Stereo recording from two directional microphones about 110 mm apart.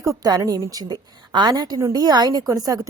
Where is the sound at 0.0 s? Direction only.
35° right (ahead or behind).